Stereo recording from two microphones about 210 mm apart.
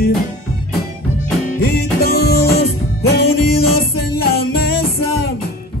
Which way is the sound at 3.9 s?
50° left (ahead or behind).